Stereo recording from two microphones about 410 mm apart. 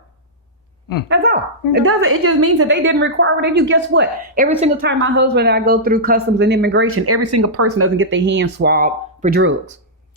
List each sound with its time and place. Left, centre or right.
1.0 s a woman's voice: right